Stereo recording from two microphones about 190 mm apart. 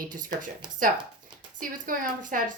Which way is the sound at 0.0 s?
45° right (ahead or behind).